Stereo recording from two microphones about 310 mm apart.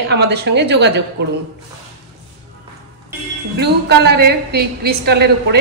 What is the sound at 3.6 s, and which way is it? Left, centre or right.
A woman's voice, right.